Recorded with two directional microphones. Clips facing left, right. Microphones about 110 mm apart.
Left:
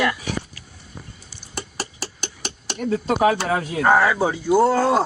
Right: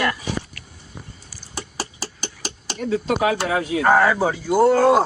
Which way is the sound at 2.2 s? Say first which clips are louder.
Even; centre (ahead or behind).